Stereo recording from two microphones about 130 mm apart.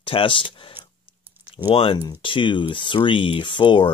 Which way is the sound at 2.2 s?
40° left (ahead or behind).